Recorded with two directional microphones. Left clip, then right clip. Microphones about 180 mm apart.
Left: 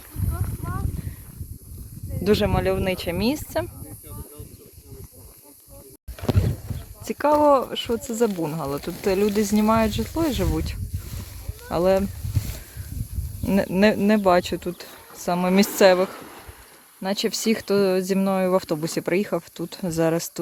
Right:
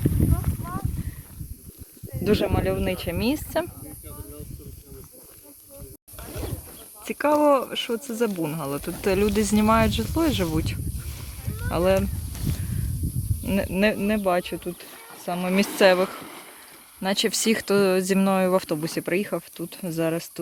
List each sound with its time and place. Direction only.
2.2 s speech: 25° left (ahead or behind); by 3.7 s 10° left (ahead or behind)
7.1 s speech: 10° left (ahead or behind)
13.4 s speech: 20° left (ahead or behind)
15.8 s speech: 15° left (ahead or behind)